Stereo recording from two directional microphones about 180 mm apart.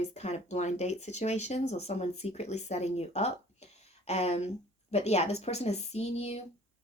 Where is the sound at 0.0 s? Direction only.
35° left (ahead or behind).